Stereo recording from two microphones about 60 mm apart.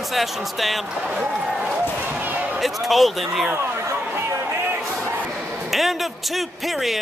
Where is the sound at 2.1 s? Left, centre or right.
Right.